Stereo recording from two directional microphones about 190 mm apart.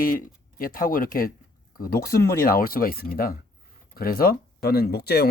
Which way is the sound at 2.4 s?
50° left (ahead or behind).